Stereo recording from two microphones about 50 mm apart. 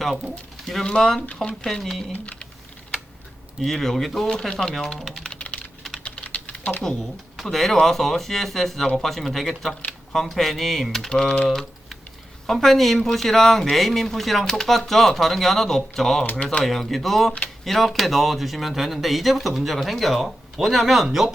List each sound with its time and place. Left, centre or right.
0.9 s speech: centre
3.6 s speech: centre
4.3 s speech: centre
5.3 s typing: left
7.3 s speech: centre
11.1 s speech: centre
11.4 s typing: centre
12.5 s speech: centre
16.4 s speech: left
16.6 s speech: centre